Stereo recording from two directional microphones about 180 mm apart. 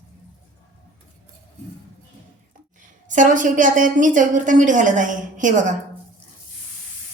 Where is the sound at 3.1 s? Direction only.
45° right (ahead or behind).